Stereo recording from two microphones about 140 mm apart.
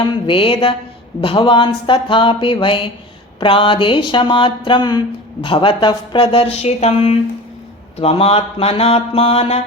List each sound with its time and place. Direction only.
0.0 s speech: 40° left (ahead or behind)
7.9 s mantra: 45° left (ahead or behind)